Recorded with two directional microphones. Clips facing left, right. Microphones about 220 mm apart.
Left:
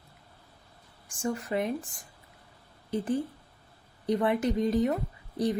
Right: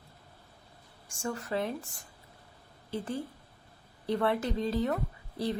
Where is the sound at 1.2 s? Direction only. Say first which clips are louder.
Left 3 dB; 15° left (ahead or behind).